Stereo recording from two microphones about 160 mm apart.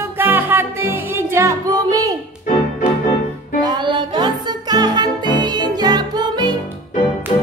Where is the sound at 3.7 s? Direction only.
30° right (ahead or behind).